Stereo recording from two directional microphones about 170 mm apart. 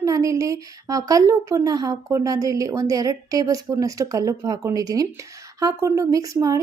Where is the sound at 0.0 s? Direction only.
20° right (ahead or behind).